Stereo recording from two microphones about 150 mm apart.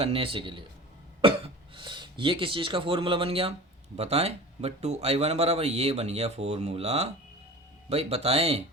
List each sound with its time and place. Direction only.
0.0 s speech: 40° right (ahead or behind)
1.7 s speech: 30° right (ahead or behind)